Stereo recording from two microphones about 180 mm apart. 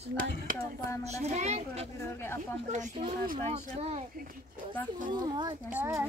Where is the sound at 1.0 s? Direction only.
40° right (ahead or behind).